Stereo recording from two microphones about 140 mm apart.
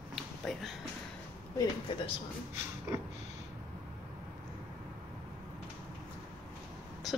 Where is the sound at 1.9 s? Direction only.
35° left (ahead or behind).